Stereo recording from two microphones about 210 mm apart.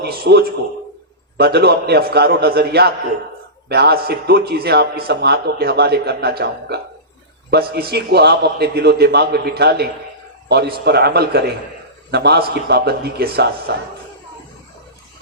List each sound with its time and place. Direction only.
0.0 s a man's voice: 50° right (ahead or behind)